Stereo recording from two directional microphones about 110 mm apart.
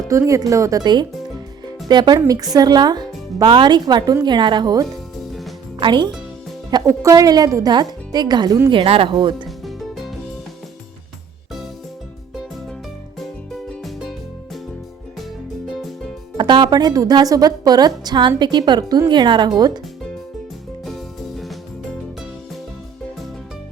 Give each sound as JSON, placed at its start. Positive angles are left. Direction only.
{"t": 0.1, "sound": "a woman's voice", "side_deg": -30}
{"t": 6.7, "sound": "a woman's voice", "side_deg": -35}
{"t": 8.7, "sound": "speech", "side_deg": -55}
{"t": 9.6, "sound": "music", "side_deg": 0}
{"t": 13.8, "sound": "music", "side_deg": 0}
{"t": 16.4, "sound": "a woman's voice", "side_deg": -45}
{"t": 20.8, "sound": "music", "side_deg": 0}